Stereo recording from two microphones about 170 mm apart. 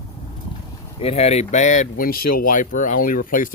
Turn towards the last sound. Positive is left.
turn(degrees=55)  # may be behind; listen again after turning